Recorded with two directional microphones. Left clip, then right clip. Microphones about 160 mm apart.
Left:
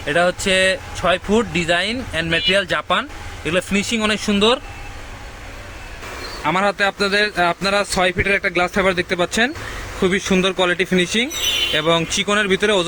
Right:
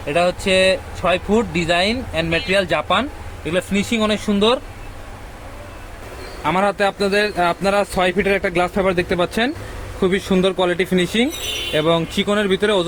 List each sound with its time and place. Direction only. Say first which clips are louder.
0.0 s speech: left 1 dB; centre (ahead or behind)
6.4 s a man's voice: even; 10° right (ahead or behind)